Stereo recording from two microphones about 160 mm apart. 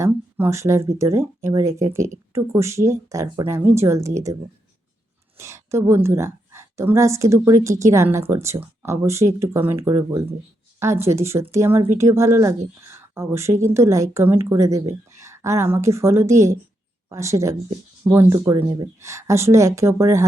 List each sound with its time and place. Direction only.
0.0 s speech: 15° right (ahead or behind)
5.4 s a woman's voice: 15° right (ahead or behind)